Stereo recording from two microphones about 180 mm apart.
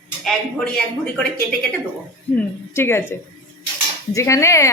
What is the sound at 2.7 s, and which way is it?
A woman's voice, 15° left (ahead or behind).